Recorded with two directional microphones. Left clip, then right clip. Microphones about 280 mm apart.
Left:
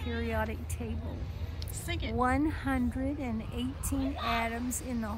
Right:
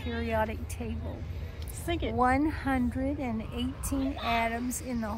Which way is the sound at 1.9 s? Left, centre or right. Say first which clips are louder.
Right 3 dB; centre.